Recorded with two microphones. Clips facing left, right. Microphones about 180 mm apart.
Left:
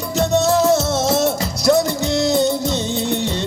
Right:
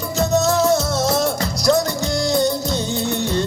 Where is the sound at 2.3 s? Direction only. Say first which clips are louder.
Left 2 dB; 25° left (ahead or behind).